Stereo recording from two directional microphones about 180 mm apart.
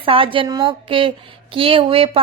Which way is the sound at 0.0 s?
30° right (ahead or behind).